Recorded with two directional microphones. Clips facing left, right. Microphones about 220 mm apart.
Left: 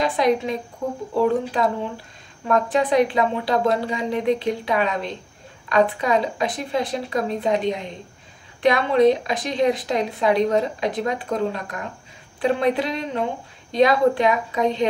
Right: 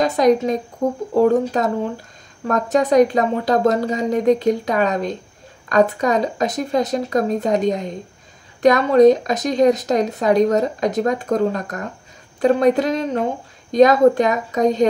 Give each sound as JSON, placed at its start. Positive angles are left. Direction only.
{"t": 0.0, "sound": "speech", "side_deg": -45}